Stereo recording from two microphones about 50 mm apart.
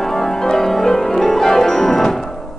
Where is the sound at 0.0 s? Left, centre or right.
Centre.